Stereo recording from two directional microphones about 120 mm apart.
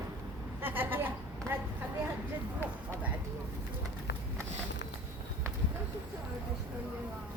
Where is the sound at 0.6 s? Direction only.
15° right (ahead or behind).